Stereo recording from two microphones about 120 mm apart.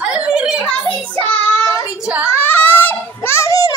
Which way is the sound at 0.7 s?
10° left (ahead or behind).